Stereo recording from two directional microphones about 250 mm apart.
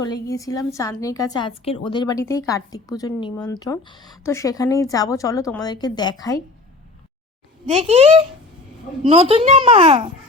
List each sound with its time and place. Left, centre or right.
0.0 s speech: centre
7.7 s a child's voice: right